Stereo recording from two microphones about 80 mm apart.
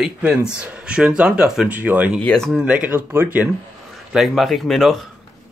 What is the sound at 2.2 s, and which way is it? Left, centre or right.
Speech, centre.